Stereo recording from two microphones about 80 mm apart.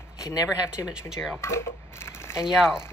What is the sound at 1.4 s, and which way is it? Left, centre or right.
Speech, left.